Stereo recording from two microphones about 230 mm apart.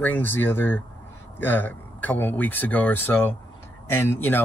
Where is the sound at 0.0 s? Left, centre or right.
Centre.